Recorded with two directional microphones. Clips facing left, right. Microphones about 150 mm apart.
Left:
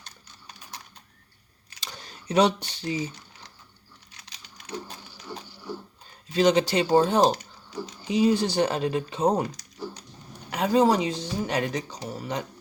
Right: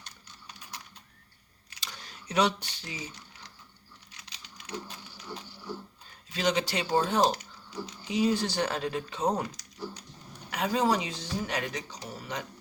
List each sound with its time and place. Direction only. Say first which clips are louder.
1.8 s speech: left 3 dB; 35° left (ahead or behind)
4.2 s a sound: left 1 dB; 45° left (ahead or behind)
6.3 s speech: left 8 dB; 30° left (ahead or behind)
10.5 s speech: left 6 dB; 30° left (ahead or behind)